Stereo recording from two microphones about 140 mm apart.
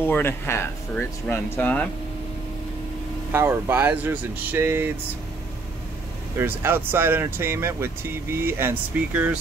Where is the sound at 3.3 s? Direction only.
15° right (ahead or behind).